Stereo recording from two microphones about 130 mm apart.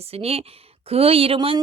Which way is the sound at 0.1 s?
50° right (ahead or behind).